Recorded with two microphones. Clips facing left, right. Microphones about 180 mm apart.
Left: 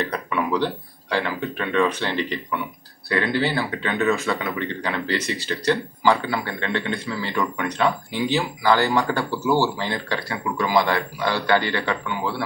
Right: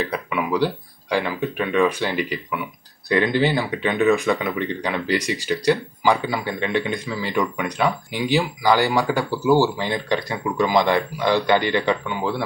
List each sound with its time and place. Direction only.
0.0 s speech: 5° right (ahead or behind)
3.1 s speech: 20° right (ahead or behind)